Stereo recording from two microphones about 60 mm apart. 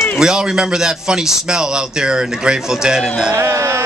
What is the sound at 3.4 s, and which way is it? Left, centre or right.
Music, right.